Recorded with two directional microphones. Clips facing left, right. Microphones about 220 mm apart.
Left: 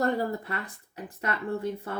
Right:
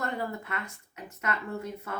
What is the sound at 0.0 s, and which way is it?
Speech, 35° left (ahead or behind).